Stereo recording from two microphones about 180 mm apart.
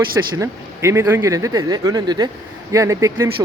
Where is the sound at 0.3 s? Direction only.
15° right (ahead or behind).